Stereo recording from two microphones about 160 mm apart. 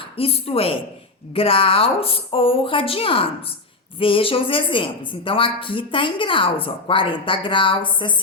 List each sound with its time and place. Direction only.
0.0 s a woman's voice: 35° left (ahead or behind)